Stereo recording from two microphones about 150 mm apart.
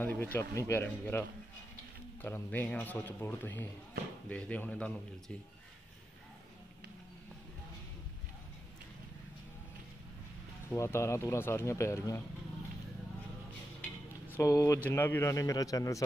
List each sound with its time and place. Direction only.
0.0 s a man's voice: 10° left (ahead or behind)
2.2 s a man's voice: 15° left (ahead or behind)
10.7 s speech: 20° left (ahead or behind)
13.7 s speech: 15° left (ahead or behind)